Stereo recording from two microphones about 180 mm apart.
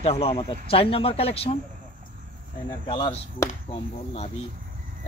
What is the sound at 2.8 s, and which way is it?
Speech, 30° left (ahead or behind).